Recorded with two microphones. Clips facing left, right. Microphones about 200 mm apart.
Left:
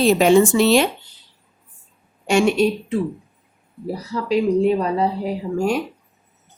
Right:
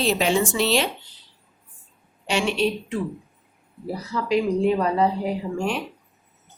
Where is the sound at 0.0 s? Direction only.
50° left (ahead or behind).